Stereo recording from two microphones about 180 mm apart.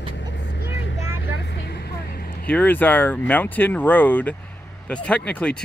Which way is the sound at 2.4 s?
10° left (ahead or behind).